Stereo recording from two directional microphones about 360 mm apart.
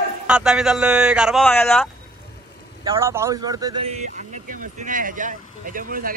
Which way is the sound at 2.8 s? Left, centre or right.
Centre.